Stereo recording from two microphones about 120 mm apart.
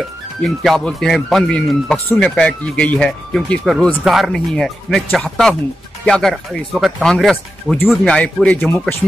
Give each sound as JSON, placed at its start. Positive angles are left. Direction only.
{"t": 0.4, "sound": "speech", "side_deg": 5}